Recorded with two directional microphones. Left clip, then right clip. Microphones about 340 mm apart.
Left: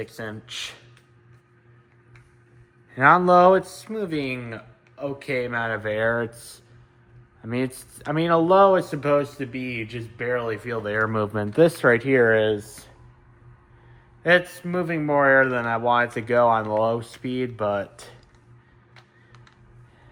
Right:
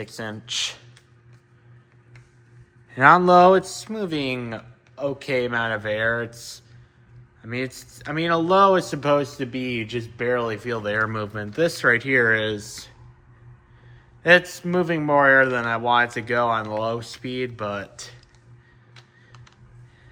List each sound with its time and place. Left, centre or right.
0.0 s speech: centre
2.9 s speech: centre
14.2 s speech: centre